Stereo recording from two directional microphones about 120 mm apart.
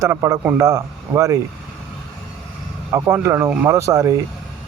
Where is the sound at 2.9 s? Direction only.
20° right (ahead or behind).